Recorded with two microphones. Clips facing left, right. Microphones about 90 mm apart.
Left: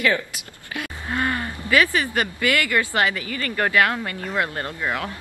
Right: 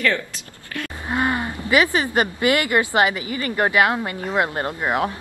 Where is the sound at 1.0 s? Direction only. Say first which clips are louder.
Right 3 dB; 20° right (ahead or behind).